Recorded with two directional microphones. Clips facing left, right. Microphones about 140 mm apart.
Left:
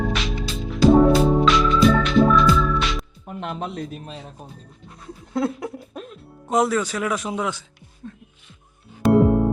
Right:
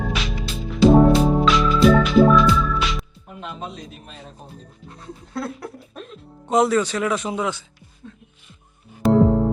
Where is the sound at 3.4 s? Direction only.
60° left (ahead or behind).